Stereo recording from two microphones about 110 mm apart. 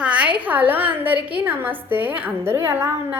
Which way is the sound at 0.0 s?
10° right (ahead or behind).